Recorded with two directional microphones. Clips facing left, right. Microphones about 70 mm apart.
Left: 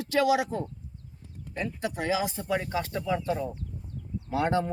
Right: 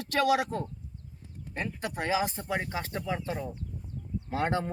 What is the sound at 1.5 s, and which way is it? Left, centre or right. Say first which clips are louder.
Speech: left 2 dB; right.